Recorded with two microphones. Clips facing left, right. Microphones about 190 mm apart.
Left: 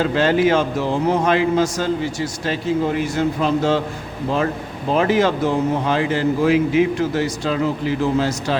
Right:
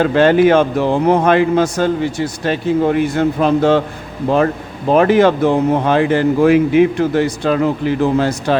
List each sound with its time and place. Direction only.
0.0 s a man's voice: 60° right (ahead or behind)
4.9 s a man's voice: 60° right (ahead or behind)